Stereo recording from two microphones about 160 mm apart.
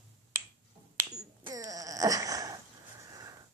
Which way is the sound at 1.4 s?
20° right (ahead or behind).